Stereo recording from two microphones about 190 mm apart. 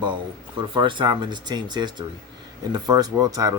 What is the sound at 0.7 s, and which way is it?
A man's voice, 25° right (ahead or behind).